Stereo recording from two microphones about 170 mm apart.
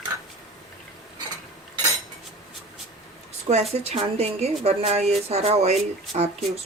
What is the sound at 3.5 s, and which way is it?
A woman's voice, 40° right (ahead or behind).